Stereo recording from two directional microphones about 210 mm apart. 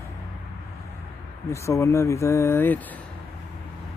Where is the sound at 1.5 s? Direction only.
15° left (ahead or behind).